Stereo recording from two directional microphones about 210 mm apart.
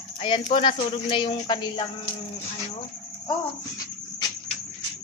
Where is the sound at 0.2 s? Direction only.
25° left (ahead or behind).